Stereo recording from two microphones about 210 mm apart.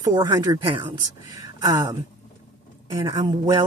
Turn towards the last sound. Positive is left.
turn(degrees=-20)  # may be behind; listen again after turning